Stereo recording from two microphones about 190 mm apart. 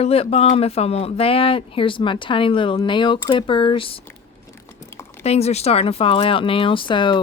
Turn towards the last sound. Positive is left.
turn(degrees=25)  # may be behind; listen again after turning